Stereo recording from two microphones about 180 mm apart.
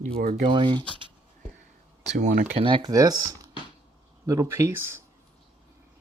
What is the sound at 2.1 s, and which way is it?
Speech, 45° right (ahead or behind).